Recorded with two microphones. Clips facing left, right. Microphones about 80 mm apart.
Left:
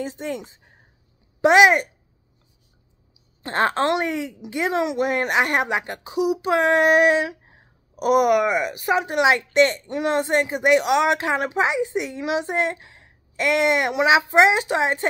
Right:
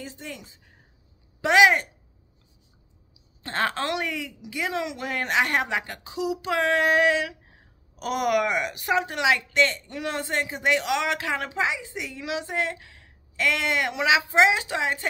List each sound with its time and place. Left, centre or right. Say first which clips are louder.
0.0 s a woman's voice: left 10 dB; left
3.4 s a woman's voice: left 6 dB; left
8.0 s speech: left 7 dB; centre
8.9 s a woman's voice: left 4 dB; left